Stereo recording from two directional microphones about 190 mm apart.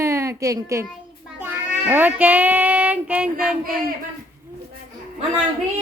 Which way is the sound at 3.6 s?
50° right (ahead or behind).